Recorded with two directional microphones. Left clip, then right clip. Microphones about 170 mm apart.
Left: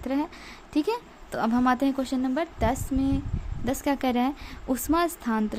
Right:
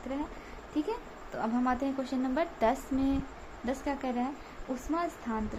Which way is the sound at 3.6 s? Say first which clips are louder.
Left 7 dB; 45° left (ahead or behind).